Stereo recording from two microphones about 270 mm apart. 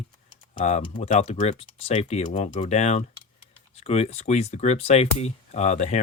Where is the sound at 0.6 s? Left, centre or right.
Left.